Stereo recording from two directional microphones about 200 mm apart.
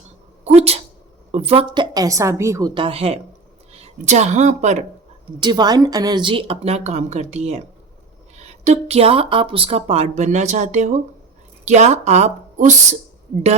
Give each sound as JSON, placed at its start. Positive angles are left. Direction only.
{"t": 0.4, "sound": "a woman's voice", "side_deg": -30}
{"t": 5.4, "sound": "a woman's voice", "side_deg": -20}
{"t": 8.6, "sound": "speech", "side_deg": -30}